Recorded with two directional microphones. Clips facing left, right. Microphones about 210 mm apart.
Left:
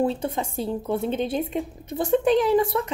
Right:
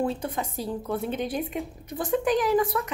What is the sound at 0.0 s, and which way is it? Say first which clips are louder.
Speech: left 4 dB; 25° left (ahead or behind).